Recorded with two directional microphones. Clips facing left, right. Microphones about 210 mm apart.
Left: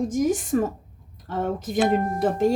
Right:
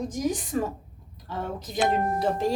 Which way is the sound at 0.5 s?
50° left (ahead or behind).